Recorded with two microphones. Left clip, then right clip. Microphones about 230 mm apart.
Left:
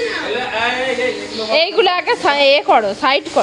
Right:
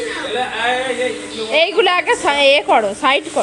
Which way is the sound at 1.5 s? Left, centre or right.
Centre.